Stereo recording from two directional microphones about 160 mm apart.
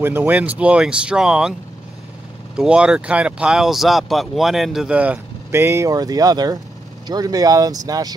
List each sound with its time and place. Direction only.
0.0 s speech: 15° right (ahead or behind)
2.5 s speech: 5° right (ahead or behind); by 8.1 s 25° right (ahead or behind)